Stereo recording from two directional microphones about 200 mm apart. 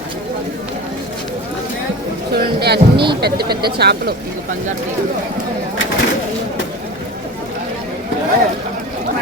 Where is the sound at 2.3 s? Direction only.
55° right (ahead or behind).